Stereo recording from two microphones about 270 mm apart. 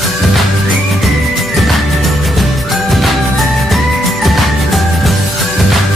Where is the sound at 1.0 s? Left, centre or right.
Centre.